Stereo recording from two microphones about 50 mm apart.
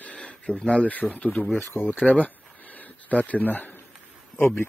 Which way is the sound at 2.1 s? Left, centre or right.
Left.